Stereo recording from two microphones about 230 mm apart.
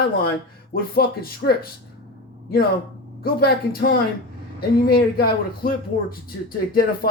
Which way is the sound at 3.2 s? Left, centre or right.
Left.